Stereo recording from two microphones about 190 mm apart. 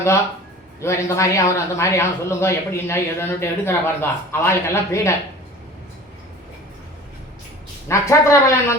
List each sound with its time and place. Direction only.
0.8 s a man's voice: 15° left (ahead or behind)
7.9 s a man's voice: 15° left (ahead or behind)